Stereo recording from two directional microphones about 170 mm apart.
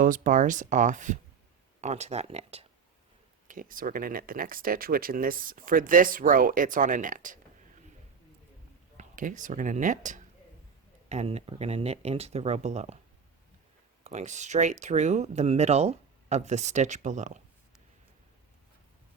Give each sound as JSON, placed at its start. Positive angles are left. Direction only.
{"t": 0.0, "sound": "speech", "side_deg": -50}
{"t": 3.4, "sound": "speech", "side_deg": -50}
{"t": 9.0, "sound": "speech", "side_deg": -50}
{"t": 14.0, "sound": "speech", "side_deg": -45}